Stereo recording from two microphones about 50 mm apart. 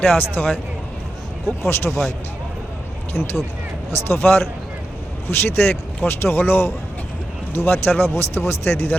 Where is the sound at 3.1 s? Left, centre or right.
Left.